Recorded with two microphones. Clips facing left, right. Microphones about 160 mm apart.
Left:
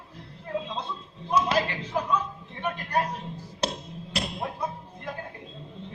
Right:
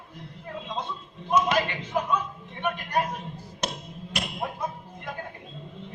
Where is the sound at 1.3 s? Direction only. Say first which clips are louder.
Right 1 dB; 35° left (ahead or behind).